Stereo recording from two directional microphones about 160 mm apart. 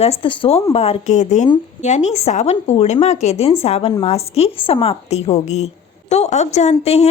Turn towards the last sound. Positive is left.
turn(degrees=40)  # may be behind; listen again after turning